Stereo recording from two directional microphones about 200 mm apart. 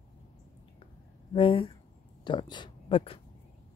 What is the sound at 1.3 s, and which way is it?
Speech, 25° left (ahead or behind).